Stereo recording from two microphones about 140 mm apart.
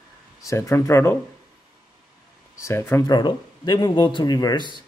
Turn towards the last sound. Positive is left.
turn(degrees=30)  # may be behind; listen again after turning